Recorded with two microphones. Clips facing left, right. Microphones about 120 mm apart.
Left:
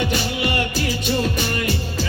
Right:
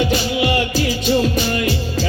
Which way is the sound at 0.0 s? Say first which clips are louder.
Right 4 dB; 55° left (ahead or behind).